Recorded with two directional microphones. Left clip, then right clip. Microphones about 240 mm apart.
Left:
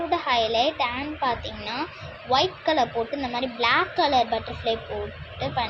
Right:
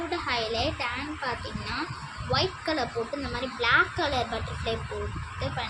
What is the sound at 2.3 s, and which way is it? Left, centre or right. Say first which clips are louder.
Speech: left 6 dB; centre.